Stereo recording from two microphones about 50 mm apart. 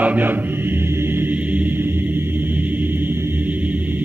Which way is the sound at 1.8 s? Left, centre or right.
Right.